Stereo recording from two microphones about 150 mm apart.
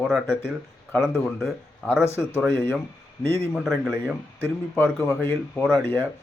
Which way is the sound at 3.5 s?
Centre (ahead or behind).